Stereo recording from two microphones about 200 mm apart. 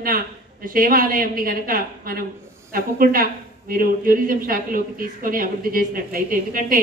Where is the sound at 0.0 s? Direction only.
45° right (ahead or behind).